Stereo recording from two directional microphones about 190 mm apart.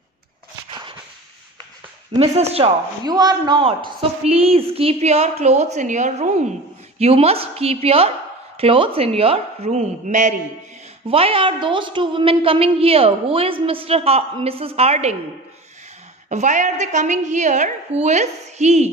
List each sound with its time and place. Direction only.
0.7 s walk: 25° right (ahead or behind)
2.1 s a woman's voice: 35° right (ahead or behind)
3.0 s a woman's voice: 20° right (ahead or behind); by 10.4 s 40° right (ahead or behind)
11.1 s a woman's voice: 30° right (ahead or behind)
16.3 s a woman's voice: 40° right (ahead or behind)